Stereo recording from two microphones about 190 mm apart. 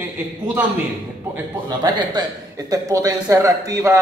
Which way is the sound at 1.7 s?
20° right (ahead or behind).